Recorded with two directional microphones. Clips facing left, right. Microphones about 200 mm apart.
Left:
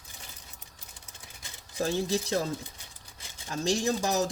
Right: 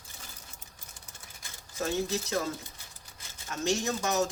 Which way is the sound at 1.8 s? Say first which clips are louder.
Left 2 dB; 30° left (ahead or behind).